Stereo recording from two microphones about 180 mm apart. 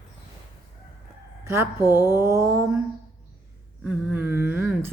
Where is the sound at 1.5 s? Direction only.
15° right (ahead or behind).